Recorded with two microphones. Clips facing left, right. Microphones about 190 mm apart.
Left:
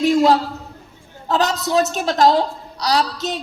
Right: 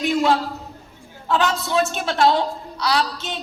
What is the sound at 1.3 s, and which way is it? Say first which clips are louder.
A woman's voice: left 2 dB; 40° left (ahead or behind).